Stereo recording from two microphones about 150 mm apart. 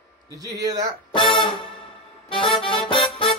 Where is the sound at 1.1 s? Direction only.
30° left (ahead or behind).